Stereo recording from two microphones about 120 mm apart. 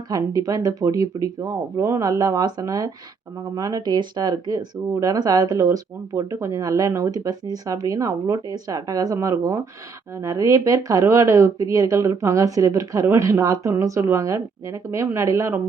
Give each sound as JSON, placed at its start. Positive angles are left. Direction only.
{"t": 0.1, "sound": "speech", "side_deg": -30}